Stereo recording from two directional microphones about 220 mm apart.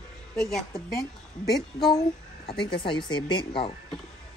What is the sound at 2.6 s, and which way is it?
Speech, 20° left (ahead or behind).